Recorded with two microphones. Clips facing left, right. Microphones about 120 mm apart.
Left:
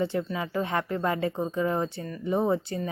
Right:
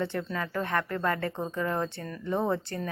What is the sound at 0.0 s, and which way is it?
A woman's voice, 15° left (ahead or behind).